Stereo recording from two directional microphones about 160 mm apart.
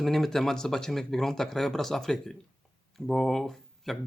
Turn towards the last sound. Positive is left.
turn(degrees=0)  # may be behind; listen again after turning